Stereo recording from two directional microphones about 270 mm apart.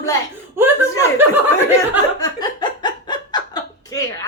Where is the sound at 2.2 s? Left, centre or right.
Centre.